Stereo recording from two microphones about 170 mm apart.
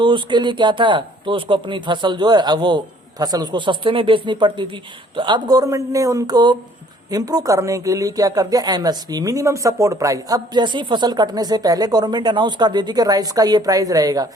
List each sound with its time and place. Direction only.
0.0 s speech: 30° right (ahead or behind)